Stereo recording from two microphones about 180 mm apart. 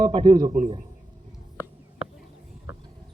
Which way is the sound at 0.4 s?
45° right (ahead or behind).